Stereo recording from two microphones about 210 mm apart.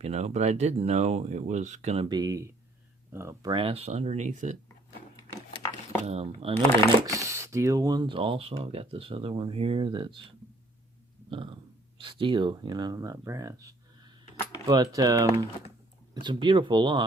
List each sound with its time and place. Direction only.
0.0 s speech: 30° right (ahead or behind)
2.0 s speech: 20° right (ahead or behind); by 4.5 s 35° right (ahead or behind)
5.5 s a sound: 15° left (ahead or behind)
6.1 s speech: 30° right (ahead or behind)
7.0 s speech: 15° right (ahead or behind)
11.3 s a sound: 25° right (ahead or behind)
12.0 s speech: 25° right (ahead or behind)